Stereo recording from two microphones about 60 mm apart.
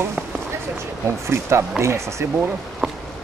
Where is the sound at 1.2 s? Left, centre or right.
Right.